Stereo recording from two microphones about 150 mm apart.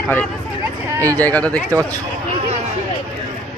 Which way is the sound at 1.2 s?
10° left (ahead or behind).